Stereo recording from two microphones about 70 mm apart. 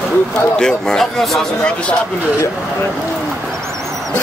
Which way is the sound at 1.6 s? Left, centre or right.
Centre.